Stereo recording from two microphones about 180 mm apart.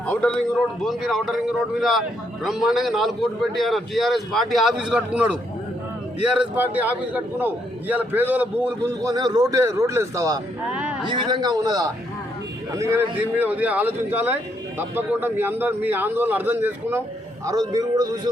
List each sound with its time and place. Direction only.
0.0 s a man's voice: 5° left (ahead or behind); by 10.4 s 20° right (ahead or behind)
10.7 s a sound: 5° right (ahead or behind)
11.0 s a man's voice: 25° right (ahead or behind)